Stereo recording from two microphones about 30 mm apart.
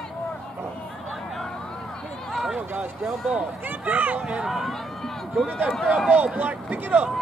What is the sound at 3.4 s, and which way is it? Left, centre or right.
Speech, right.